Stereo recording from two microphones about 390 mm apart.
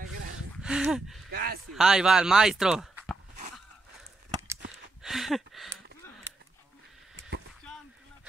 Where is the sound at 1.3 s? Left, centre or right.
Right.